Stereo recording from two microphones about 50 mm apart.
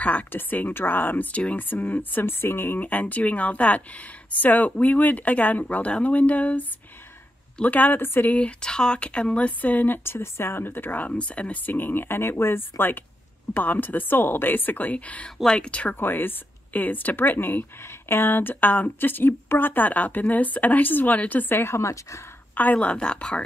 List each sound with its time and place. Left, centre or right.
0.3 s speech: left
2.8 s speech: left
7.6 s speech: left
8.4 s speech: centre; by 9.9 s left
10.0 s speech: left
11.1 s speech: left
15.4 s speech: centre
15.7 s speech: left
16.0 s speech: left
21.5 s speech: left
22.6 s speech: left